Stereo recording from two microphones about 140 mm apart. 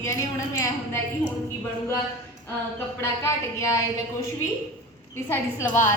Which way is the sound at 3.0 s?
20° left (ahead or behind).